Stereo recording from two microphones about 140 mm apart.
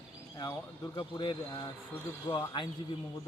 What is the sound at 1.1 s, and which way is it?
A man's voice, 35° left (ahead or behind).